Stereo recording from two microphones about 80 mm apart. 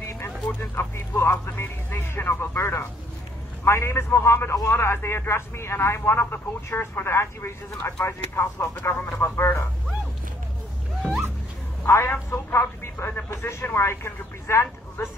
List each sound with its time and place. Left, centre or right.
0.5 s speech: left
11.8 s a woman's voice: left